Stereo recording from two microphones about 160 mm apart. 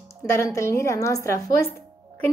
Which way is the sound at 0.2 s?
20° left (ahead or behind).